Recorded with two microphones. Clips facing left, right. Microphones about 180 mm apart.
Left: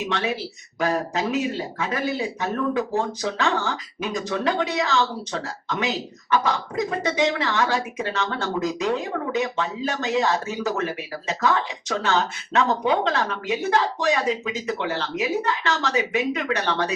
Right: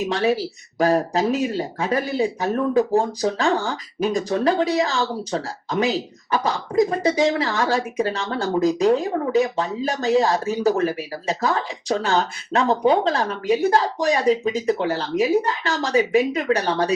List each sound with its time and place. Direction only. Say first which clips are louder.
0.0 s speech: right 6 dB; 35° right (ahead or behind)